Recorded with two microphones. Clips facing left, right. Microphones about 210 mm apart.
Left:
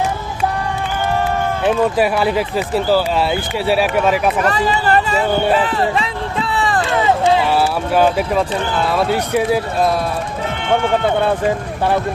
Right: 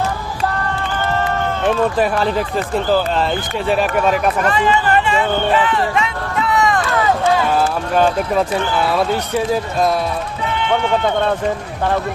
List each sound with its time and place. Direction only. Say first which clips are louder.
1.2 s speech: left 1 dB; 5° left (ahead or behind)
4.4 s speech: even; 35° left (ahead or behind)
5.5 s run: left 1 dB; 40° left (ahead or behind)
7.5 s speech: left 1 dB; 5° left (ahead or behind)
10.5 s a sound: even; 50° left (ahead or behind)
11.2 s speech: left 2 dB; 10° left (ahead or behind)